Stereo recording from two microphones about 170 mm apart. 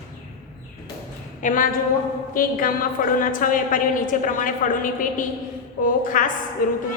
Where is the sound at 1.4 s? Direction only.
50° left (ahead or behind).